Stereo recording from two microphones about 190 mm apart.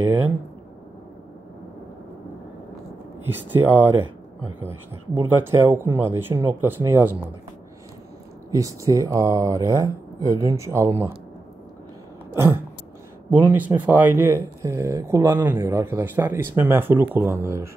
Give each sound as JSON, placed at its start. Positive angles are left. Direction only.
{"t": 0.0, "sound": "speech", "side_deg": -10}
{"t": 3.3, "sound": "speech", "side_deg": -10}
{"t": 5.4, "sound": "speech", "side_deg": -10}
{"t": 8.5, "sound": "speech", "side_deg": -15}
{"t": 13.3, "sound": "speech", "side_deg": -10}